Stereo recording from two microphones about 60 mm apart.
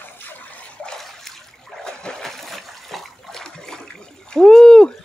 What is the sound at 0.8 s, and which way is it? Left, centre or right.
Splash, centre.